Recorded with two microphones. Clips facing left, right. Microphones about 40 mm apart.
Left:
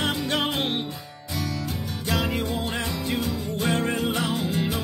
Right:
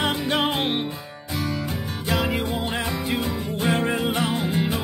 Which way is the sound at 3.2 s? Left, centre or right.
Right.